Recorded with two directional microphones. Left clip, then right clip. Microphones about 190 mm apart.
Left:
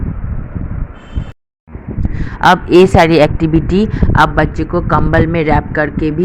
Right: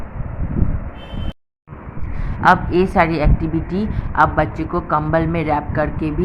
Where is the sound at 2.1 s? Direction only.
35° left (ahead or behind).